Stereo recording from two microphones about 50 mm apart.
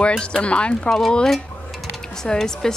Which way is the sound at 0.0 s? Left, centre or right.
Centre.